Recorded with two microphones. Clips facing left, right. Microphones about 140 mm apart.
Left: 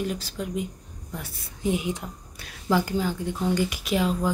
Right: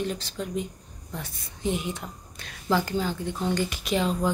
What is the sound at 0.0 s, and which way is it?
A woman's voice, 5° left (ahead or behind).